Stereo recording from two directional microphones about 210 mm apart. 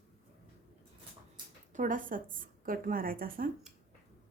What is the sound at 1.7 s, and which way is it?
A woman's voice, 40° right (ahead or behind).